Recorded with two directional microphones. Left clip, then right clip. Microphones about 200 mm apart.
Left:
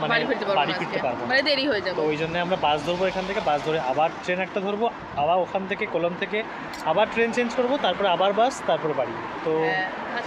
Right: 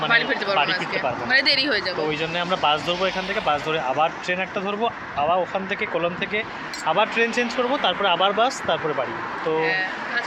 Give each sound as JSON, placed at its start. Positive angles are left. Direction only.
{"t": 0.1, "sound": "speech", "side_deg": 15}
{"t": 0.5, "sound": "speech", "side_deg": -5}
{"t": 0.9, "sound": "speech", "side_deg": 20}
{"t": 2.0, "sound": "speech", "side_deg": -5}
{"t": 9.6, "sound": "a sound", "side_deg": 20}